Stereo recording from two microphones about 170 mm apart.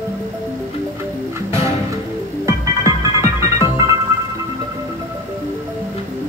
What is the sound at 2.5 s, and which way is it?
Music, 20° right (ahead or behind).